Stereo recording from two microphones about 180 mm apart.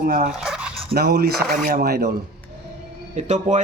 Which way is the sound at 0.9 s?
60° right (ahead or behind).